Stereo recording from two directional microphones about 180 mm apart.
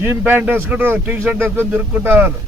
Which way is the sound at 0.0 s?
10° right (ahead or behind).